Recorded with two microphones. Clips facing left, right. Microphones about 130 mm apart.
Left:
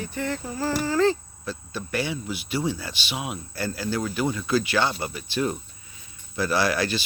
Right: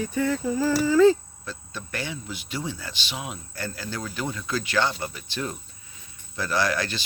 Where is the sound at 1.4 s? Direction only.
10° left (ahead or behind).